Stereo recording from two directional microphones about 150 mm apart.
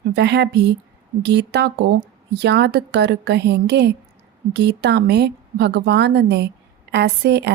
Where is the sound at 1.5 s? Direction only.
90° right.